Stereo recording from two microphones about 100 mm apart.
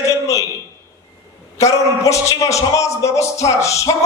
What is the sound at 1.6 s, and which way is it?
A man's voice, 30° left (ahead or behind).